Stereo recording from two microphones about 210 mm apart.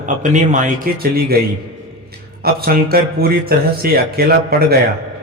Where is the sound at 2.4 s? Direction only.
45° right (ahead or behind).